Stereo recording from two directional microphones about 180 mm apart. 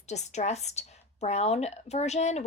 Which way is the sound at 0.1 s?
40° left (ahead or behind).